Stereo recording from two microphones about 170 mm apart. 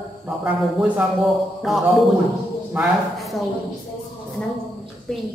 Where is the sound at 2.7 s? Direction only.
5° right (ahead or behind).